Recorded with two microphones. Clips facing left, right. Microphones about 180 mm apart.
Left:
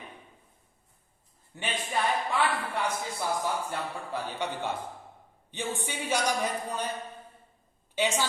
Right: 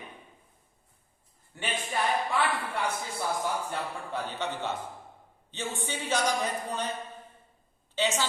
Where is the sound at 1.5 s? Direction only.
20° left (ahead or behind).